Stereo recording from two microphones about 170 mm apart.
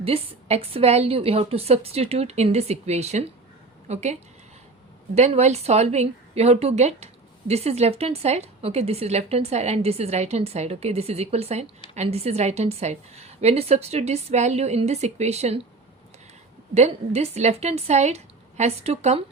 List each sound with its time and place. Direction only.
0.0 s a woman's voice: 35° right (ahead or behind)
16.7 s a woman's voice: 40° right (ahead or behind)